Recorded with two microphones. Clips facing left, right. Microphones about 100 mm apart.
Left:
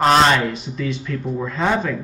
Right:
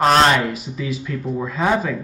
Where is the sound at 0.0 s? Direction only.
Centre (ahead or behind).